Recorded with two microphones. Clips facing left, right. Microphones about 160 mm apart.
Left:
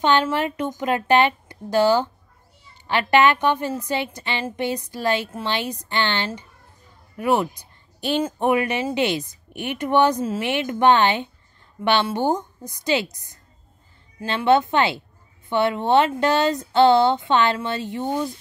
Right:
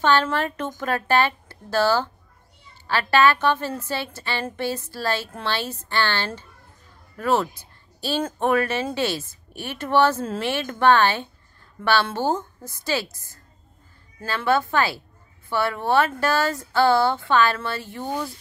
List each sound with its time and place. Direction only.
0.0 s speech: 15° left (ahead or behind)